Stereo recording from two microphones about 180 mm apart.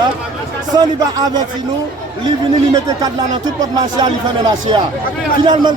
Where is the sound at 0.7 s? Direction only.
20° right (ahead or behind).